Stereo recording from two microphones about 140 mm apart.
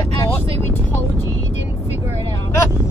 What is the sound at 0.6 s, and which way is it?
Vehicle, 15° left (ahead or behind).